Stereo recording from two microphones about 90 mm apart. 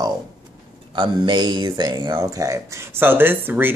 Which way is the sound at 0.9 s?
55° right (ahead or behind).